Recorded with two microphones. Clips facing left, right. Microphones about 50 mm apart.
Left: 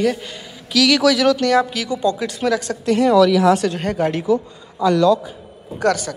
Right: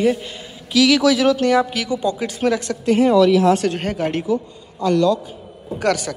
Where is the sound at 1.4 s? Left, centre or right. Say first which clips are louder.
Even; centre.